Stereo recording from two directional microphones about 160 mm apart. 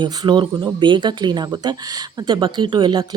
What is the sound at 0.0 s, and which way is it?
Speech, 30° right (ahead or behind).